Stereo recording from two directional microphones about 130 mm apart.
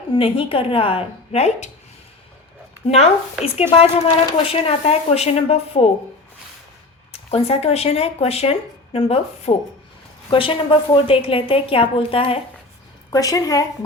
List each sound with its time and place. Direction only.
0.1 s speech: 45° left (ahead or behind)
2.8 s speech: 50° left (ahead or behind)
7.1 s speech: 50° left (ahead or behind)
13.1 s a woman's voice: 25° left (ahead or behind)